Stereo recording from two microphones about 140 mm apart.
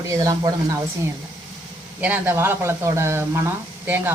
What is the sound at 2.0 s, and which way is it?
Speech, 15° right (ahead or behind).